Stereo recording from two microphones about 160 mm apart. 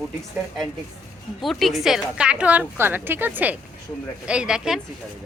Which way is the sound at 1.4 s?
Centre (ahead or behind).